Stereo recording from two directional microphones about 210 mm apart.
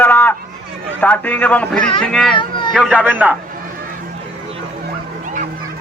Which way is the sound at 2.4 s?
20° left (ahead or behind).